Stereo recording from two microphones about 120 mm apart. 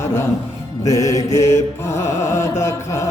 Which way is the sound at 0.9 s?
30° left (ahead or behind).